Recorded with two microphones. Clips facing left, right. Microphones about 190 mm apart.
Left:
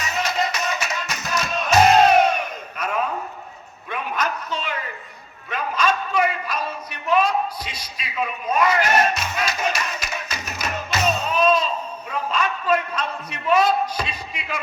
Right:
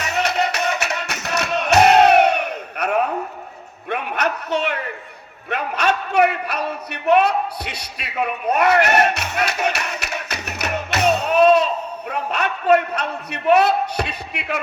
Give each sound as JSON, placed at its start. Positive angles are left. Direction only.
{"t": 0.0, "sound": "music", "side_deg": -65}
{"t": 3.8, "sound": "a sound", "side_deg": -65}
{"t": 5.5, "sound": "a man's voice", "side_deg": -65}